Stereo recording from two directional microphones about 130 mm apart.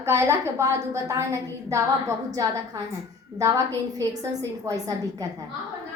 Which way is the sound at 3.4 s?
25° right (ahead or behind).